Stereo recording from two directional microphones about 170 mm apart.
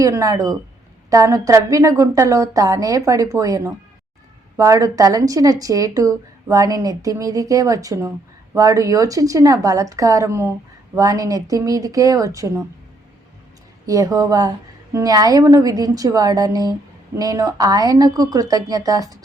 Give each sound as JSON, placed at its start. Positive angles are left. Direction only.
{"t": 0.0, "sound": "speech", "side_deg": -20}
{"t": 13.8, "sound": "speech", "side_deg": -20}